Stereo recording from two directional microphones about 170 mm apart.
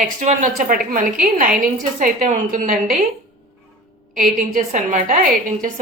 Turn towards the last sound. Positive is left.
turn(degrees=-50)  # may be behind; listen again after turning